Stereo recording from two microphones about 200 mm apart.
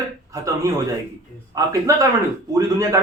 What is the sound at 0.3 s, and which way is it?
A man's voice, 15° right (ahead or behind).